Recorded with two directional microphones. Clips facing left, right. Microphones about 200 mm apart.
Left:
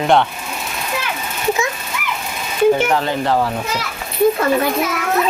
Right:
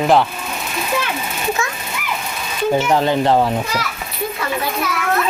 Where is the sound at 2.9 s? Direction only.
25° right (ahead or behind).